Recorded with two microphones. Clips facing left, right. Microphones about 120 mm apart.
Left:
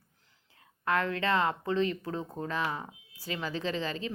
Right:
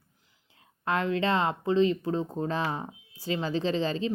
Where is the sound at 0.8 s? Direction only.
25° right (ahead or behind).